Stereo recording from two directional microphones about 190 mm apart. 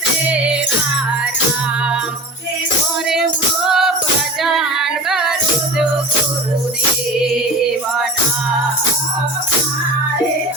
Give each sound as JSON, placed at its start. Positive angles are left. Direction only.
{"t": 3.1, "sound": "music", "side_deg": -5}
{"t": 4.4, "sound": "female singing", "side_deg": 0}